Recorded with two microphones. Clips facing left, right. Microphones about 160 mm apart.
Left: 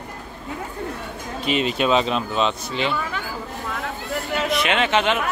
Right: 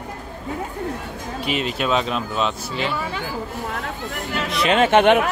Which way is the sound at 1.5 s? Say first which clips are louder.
Left 3 dB; centre (ahead or behind).